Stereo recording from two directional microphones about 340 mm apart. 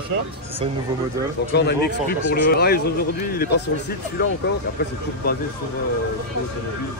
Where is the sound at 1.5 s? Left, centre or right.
Left.